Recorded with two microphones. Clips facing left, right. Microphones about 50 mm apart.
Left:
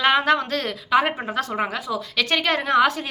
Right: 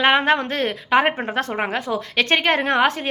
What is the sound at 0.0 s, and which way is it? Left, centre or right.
A woman's voice, right.